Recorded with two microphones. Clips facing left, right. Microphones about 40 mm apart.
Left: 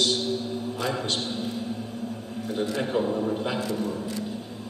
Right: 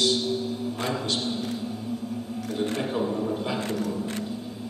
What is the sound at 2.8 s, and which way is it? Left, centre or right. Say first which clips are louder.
Speech: left 1 dB; centre.